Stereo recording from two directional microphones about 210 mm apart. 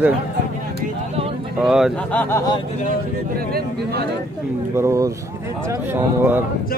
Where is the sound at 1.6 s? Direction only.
Centre (ahead or behind); by 2.6 s 15° left (ahead or behind).